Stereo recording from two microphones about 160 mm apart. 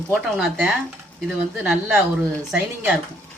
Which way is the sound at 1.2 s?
5° right (ahead or behind).